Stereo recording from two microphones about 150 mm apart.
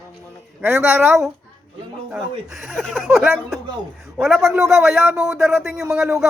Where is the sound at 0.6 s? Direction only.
15° right (ahead or behind).